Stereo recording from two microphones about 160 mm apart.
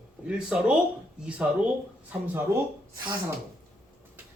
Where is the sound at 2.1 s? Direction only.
15° right (ahead or behind).